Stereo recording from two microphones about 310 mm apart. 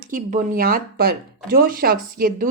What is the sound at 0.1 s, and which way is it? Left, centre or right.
Speech, right.